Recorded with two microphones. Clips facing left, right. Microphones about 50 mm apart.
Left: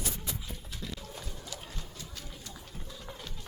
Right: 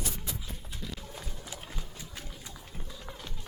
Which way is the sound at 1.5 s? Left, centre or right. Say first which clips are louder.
Right 1 dB; centre.